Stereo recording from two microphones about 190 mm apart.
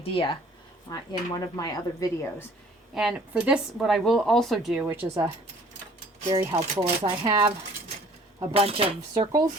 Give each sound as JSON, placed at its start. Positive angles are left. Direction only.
{"t": 0.0, "sound": "a woman's voice", "side_deg": 30}
{"t": 2.9, "sound": "speech", "side_deg": 0}
{"t": 6.6, "sound": "speech", "side_deg": -30}
{"t": 8.5, "sound": "speech", "side_deg": -30}